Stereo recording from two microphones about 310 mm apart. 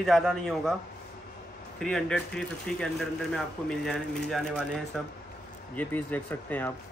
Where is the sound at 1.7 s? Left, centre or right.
Centre.